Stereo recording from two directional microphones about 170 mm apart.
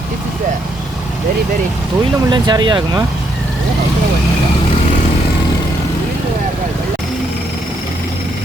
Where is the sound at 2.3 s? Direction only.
25° right (ahead or behind).